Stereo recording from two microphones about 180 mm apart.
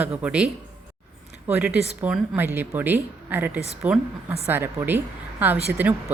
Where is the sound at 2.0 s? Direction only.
5° right (ahead or behind).